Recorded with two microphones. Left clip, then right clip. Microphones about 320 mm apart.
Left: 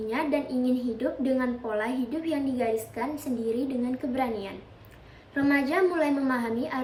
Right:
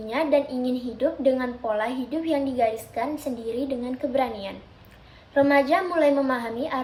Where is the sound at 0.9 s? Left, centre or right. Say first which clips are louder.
Right 5 dB; centre.